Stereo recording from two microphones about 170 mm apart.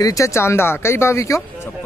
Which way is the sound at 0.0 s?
20° left (ahead or behind).